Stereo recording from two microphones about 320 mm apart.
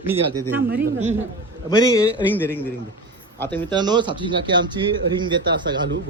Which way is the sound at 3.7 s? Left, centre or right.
Centre.